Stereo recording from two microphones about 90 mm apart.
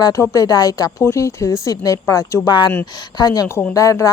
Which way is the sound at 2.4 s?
55° left (ahead or behind).